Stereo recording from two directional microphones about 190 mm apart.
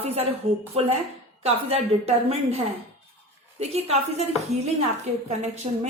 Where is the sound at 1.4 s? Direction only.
30° right (ahead or behind).